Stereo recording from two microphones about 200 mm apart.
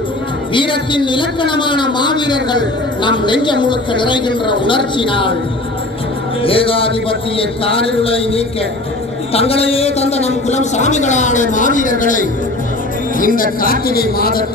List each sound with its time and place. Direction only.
0.6 s speech: 25° left (ahead or behind)
6.4 s a man's voice: 25° left (ahead or behind); by 14.4 s 50° left (ahead or behind)